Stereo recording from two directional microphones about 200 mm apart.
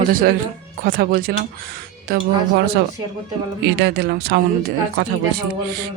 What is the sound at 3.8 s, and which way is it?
Speech, 55° right (ahead or behind).